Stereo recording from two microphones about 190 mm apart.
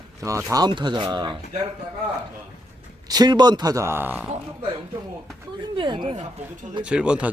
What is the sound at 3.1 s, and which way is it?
Speech, 20° right (ahead or behind).